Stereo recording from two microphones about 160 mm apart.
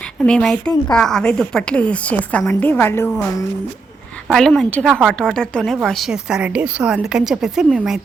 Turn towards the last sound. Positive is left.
turn(degrees=-5)  # may be behind; listen again after turning